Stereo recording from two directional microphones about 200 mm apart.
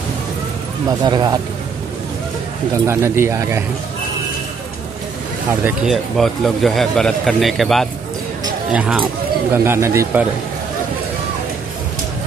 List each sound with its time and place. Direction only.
1.0 s speech: 20° right (ahead or behind)
2.7 s speech: 15° right (ahead or behind)
5.6 s a man's voice: 5° right (ahead or behind)